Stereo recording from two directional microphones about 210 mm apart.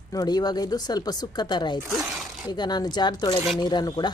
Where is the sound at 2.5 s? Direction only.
20° left (ahead or behind).